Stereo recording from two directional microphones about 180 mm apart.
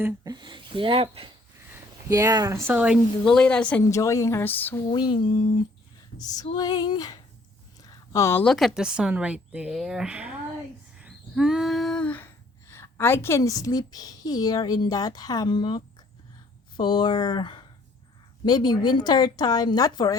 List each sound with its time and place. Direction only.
0.0 s speech: 25° right (ahead or behind)
2.0 s a woman's voice: 20° right (ahead or behind); by 4.8 s 10° left (ahead or behind)
4.9 s speech: 25° left (ahead or behind)
5.2 s speech: 45° left (ahead or behind)
6.3 s a woman's voice: 20° left (ahead or behind); by 10.3 s 5° right (ahead or behind)
10.9 s a sound: 5° right (ahead or behind); by 16.0 s 25° left (ahead or behind)
16.7 s speech: 25° left (ahead or behind)